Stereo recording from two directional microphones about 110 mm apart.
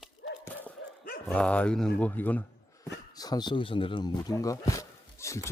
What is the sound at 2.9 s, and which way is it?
Speech, 35° left (ahead or behind).